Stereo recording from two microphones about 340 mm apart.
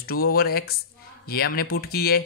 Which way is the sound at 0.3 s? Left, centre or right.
Left.